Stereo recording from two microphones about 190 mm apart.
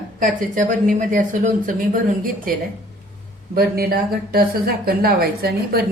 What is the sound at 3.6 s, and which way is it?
A woman's voice, 50° right (ahead or behind).